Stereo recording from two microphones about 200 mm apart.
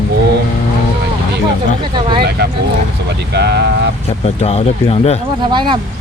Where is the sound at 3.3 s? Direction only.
55° right (ahead or behind).